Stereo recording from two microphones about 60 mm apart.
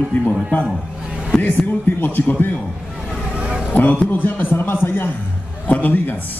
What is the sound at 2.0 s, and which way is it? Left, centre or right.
Speech, left.